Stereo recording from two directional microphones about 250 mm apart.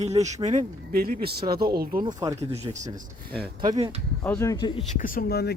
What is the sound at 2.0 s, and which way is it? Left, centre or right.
Speech, centre.